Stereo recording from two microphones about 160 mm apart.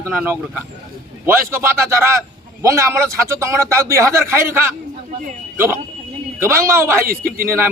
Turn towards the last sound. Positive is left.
turn(degrees=-65)  # may be behind; listen again after turning